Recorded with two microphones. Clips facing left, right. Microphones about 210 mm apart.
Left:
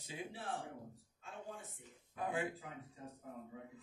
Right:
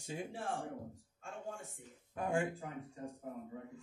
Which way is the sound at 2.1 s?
50° right (ahead or behind).